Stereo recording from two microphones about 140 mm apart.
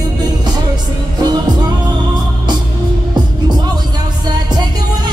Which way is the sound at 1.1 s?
30° right (ahead or behind).